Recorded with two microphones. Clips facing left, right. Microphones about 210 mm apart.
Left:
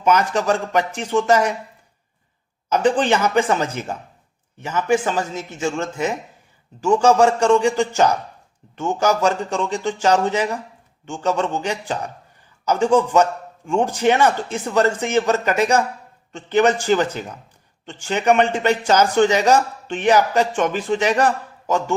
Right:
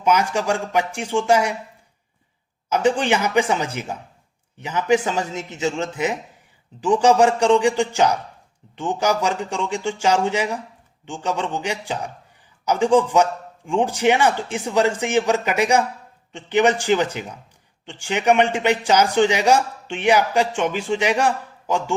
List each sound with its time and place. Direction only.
0.0 s a man's voice: 10° right (ahead or behind)
2.6 s a man's voice: 10° right (ahead or behind)